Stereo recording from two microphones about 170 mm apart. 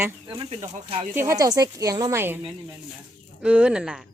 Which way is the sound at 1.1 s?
15° right (ahead or behind).